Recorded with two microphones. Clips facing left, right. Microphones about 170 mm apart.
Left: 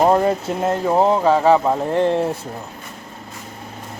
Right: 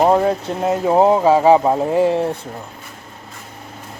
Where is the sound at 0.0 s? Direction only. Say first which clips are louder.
Right 1 dB; centre (ahead or behind).